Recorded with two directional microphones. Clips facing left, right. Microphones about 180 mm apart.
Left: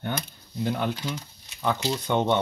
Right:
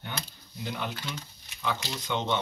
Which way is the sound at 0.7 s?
55° left (ahead or behind).